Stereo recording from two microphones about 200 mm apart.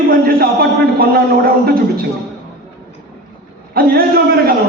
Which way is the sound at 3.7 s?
50° right (ahead or behind).